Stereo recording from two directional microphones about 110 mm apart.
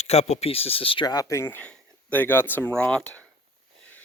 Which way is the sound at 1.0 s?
30° left (ahead or behind).